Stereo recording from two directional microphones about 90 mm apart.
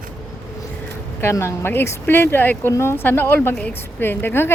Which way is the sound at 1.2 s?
30° left (ahead or behind).